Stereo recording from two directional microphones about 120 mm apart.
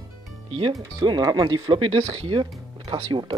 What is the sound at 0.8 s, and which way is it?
Speech, 35° right (ahead or behind).